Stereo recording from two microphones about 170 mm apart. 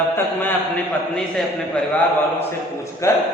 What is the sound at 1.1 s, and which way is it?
Speech, 5° left (ahead or behind).